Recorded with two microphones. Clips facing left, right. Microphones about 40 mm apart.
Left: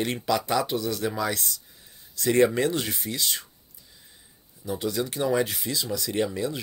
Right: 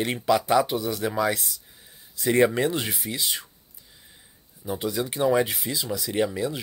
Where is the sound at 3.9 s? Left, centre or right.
Centre.